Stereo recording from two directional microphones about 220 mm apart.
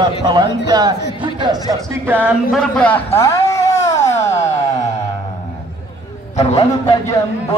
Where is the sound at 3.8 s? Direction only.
30° left (ahead or behind).